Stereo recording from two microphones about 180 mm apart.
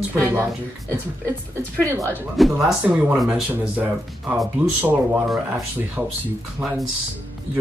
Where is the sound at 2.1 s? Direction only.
10° left (ahead or behind).